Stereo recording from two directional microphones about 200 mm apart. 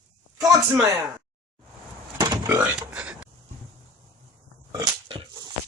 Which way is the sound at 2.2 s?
15° right (ahead or behind).